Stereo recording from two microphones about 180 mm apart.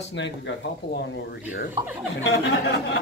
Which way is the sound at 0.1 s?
90° left.